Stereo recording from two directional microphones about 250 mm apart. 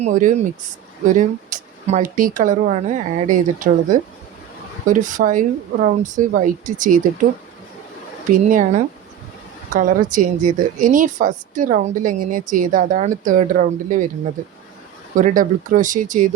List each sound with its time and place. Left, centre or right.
0.0 s a woman's voice: right
8.3 s a woman's voice: right
15.2 s a woman's voice: right